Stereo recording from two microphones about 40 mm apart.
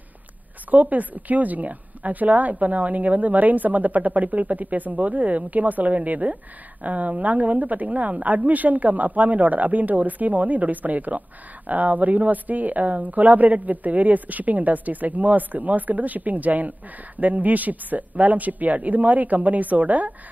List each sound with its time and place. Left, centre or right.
0.7 s a woman's voice: right